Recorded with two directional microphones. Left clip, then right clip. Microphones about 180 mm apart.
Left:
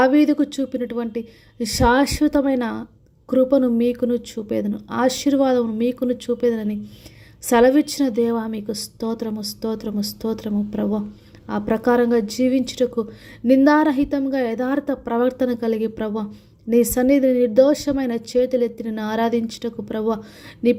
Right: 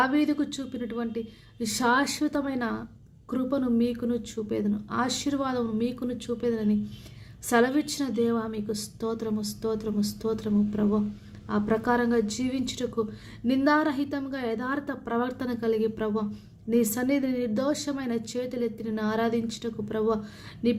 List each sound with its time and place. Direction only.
0.0 s a woman's voice: 35° left (ahead or behind)